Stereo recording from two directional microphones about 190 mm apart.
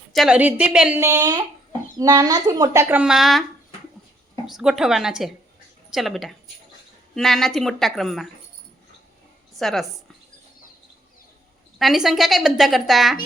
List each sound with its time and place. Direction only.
0.1 s speech: centre (ahead or behind)
4.4 s a woman's voice: centre (ahead or behind)
9.6 s a woman's voice: centre (ahead or behind)
11.8 s a woman's voice: centre (ahead or behind)